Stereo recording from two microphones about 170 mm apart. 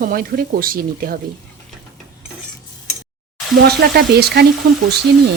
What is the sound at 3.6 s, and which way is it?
Frying, 70° right (ahead or behind).